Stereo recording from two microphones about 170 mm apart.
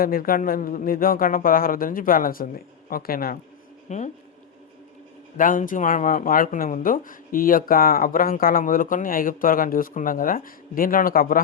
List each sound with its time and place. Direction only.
0.0 s speech: 60° left (ahead or behind)
3.8 s speech: 45° left (ahead or behind)
5.4 s speech: 50° left (ahead or behind)